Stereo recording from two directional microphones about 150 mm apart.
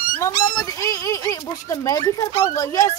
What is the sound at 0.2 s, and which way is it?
Speech, 20° left (ahead or behind).